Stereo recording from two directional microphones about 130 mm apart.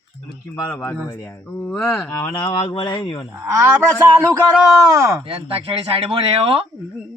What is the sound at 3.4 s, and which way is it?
Speech, 20° right (ahead or behind).